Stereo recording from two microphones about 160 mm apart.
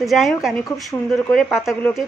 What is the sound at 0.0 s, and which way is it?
A woman's voice, centre (ahead or behind).